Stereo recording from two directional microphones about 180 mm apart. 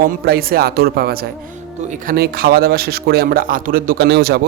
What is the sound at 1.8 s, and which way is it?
Speech, 40° right (ahead or behind).